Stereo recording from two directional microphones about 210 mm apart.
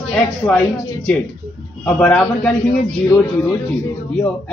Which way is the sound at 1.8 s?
5° left (ahead or behind).